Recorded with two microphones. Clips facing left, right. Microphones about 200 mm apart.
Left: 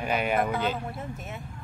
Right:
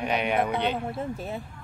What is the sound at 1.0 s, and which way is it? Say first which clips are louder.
Speech: right 6 dB; 30° right (ahead or behind).